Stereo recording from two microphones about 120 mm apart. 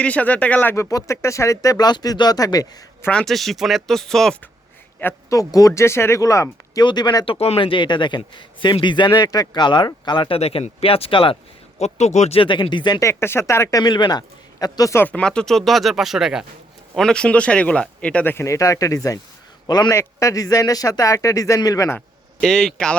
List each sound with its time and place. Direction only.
0.0 s speech: 10° left (ahead or behind); by 2.6 s 30° left (ahead or behind)
3.1 s speech: 5° left (ahead or behind)
5.3 s speech: 30° left (ahead or behind)
7.3 s a man's voice: 60° left (ahead or behind)
11.8 s speech: 70° left (ahead or behind)
12.4 s speech: 45° left (ahead or behind)
13.0 s speech: 20° left (ahead or behind)
14.9 s speech: 10° left (ahead or behind); by 21.9 s 30° left (ahead or behind)
22.4 s speech: 5° left (ahead or behind)